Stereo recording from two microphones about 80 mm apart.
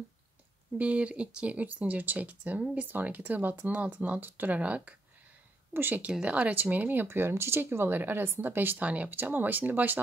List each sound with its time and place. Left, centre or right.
0.7 s speech: centre